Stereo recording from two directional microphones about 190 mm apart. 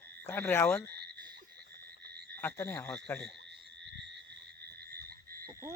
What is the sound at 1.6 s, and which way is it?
Frog, 60° right (ahead or behind).